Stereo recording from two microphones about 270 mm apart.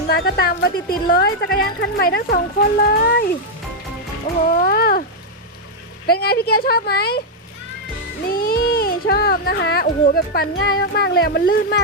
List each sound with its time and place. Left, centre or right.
0.1 s speech: left
4.4 s a sound: left
6.1 s speech: left
8.3 s speech: left